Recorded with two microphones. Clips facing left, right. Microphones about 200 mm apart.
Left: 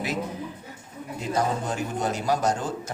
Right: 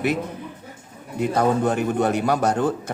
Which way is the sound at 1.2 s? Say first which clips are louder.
Right 7 dB; 60° right (ahead or behind).